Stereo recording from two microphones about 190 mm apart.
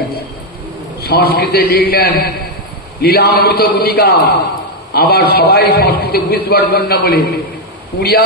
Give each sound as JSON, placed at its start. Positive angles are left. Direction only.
{"t": 1.0, "sound": "a man's voice", "side_deg": 55}